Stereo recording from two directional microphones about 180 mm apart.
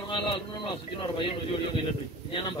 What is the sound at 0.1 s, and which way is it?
Speech, 25° left (ahead or behind).